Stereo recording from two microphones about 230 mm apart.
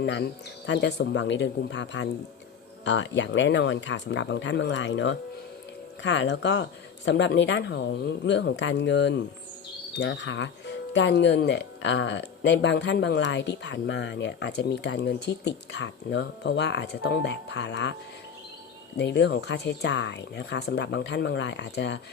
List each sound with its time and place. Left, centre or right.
0.0 s speech: left
18.9 s speech: left